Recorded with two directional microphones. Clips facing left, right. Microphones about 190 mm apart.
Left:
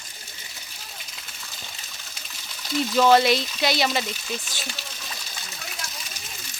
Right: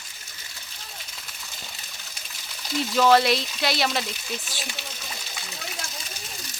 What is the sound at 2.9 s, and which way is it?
Speech, centre (ahead or behind).